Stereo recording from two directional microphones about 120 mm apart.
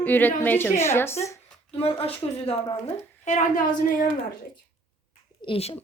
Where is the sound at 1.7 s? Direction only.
55° left (ahead or behind).